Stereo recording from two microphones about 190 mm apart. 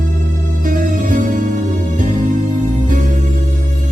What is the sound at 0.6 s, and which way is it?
Music, 45° right (ahead or behind).